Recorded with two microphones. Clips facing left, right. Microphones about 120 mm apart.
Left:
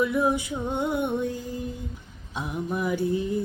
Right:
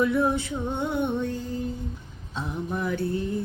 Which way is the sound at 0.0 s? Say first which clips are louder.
Right 1 dB; 10° left (ahead or behind).